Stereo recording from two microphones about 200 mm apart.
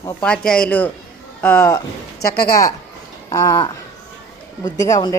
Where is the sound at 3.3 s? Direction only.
15° left (ahead or behind).